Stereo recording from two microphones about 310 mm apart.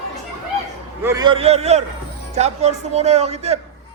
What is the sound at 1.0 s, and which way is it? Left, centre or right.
A man's voice, centre.